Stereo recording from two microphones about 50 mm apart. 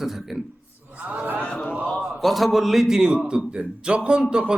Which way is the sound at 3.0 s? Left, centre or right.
Centre.